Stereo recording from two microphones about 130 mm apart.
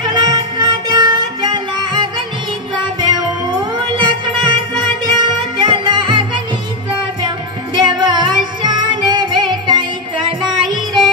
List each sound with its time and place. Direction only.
0.0 s music: 35° right (ahead or behind)